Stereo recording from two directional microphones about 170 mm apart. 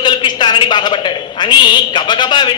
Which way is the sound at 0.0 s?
25° left (ahead or behind).